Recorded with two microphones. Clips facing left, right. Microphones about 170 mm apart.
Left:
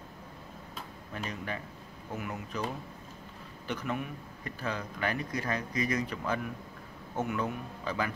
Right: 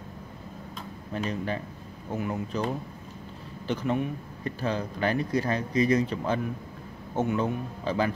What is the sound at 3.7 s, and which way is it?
Speech, 30° right (ahead or behind).